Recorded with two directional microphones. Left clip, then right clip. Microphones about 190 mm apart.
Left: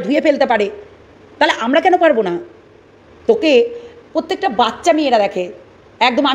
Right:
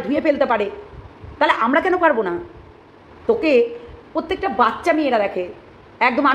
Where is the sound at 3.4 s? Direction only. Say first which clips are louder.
Left 2 dB; 35° left (ahead or behind).